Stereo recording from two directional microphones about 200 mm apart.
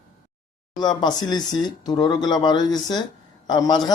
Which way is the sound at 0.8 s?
20° left (ahead or behind).